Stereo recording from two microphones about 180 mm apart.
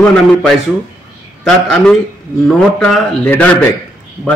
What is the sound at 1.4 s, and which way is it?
A man's voice, 5° left (ahead or behind).